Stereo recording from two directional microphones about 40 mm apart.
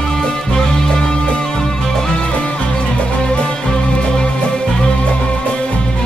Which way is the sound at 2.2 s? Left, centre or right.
Left.